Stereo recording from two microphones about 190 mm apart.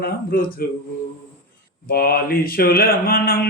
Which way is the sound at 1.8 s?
50° left (ahead or behind).